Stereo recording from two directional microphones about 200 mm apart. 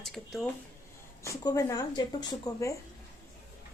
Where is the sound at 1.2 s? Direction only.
15° left (ahead or behind).